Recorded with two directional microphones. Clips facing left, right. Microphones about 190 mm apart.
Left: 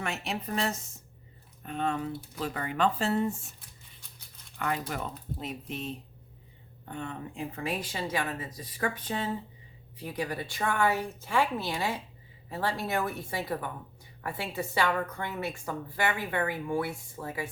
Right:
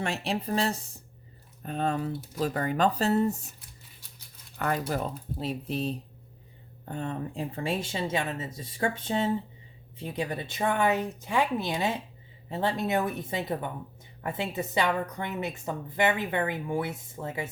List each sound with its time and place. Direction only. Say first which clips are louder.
0.0 s speech: right 4 dB; 30° right (ahead or behind)
4.5 s a woman's voice: right 4 dB; 40° right (ahead or behind); by 17.5 s 20° right (ahead or behind)